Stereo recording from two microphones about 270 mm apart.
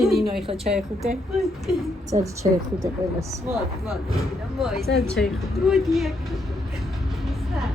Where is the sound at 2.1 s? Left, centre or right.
Right.